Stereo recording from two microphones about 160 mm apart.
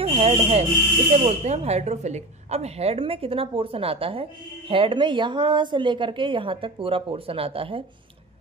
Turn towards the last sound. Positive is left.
turn(degrees=-35)  # may be behind; listen again after turning